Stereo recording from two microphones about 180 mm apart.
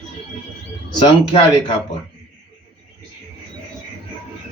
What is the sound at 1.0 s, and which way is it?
Speech, 25° left (ahead or behind).